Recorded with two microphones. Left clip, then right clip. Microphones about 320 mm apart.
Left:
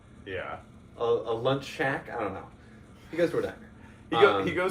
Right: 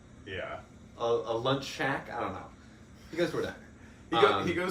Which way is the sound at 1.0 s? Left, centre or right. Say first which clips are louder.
Left 2 dB; centre.